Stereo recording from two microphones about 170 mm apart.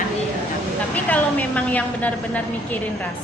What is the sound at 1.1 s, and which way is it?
A woman's voice, 10° left (ahead or behind).